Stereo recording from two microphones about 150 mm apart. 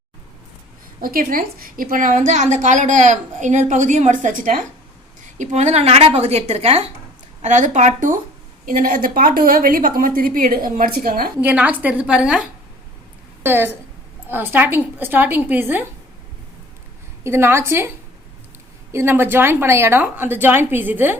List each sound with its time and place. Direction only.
1.0 s a woman's voice: 70° right (ahead or behind)
11.3 s a woman's voice: 10° right (ahead or behind)
17.2 s a woman's voice: 15° right (ahead or behind)